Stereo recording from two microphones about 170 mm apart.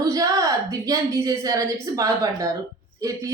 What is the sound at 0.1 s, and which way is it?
A woman's voice, 20° right (ahead or behind).